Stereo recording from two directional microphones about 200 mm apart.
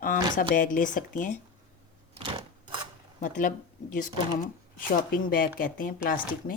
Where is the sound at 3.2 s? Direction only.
40° left (ahead or behind).